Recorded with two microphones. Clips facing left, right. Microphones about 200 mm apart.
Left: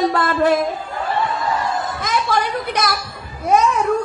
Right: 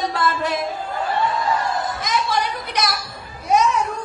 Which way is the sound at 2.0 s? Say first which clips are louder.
Left 4 dB; 55° left (ahead or behind).